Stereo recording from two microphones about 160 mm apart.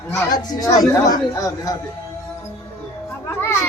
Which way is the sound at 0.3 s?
25° left (ahead or behind).